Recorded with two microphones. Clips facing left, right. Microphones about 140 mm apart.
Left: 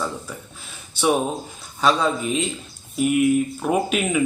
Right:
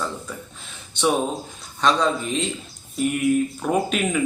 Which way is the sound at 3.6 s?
5° left (ahead or behind).